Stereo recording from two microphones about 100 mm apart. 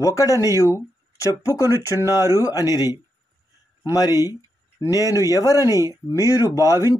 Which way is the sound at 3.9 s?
40° left (ahead or behind).